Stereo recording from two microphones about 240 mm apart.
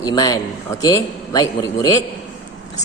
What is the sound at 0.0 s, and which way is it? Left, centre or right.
A man's voice, centre.